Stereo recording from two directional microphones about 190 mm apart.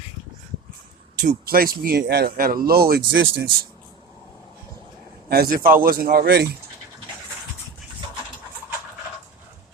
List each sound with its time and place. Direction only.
1.2 s speech: 45° right (ahead or behind)
5.3 s speech: 50° right (ahead or behind)